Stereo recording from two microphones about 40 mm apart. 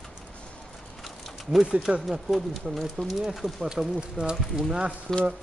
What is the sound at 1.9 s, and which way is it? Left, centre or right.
Speech, right.